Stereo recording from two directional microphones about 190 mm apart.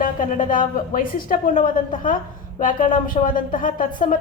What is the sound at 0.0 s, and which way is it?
A woman's voice, 45° left (ahead or behind).